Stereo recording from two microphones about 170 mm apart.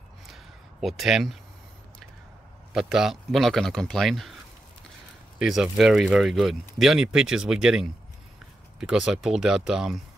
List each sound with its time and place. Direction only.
0.3 s a sound: centre (ahead or behind)
2.7 s speech: 5° right (ahead or behind)
5.4 s speech: centre (ahead or behind)